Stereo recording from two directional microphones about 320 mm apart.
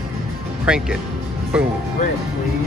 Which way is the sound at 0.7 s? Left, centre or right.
Centre.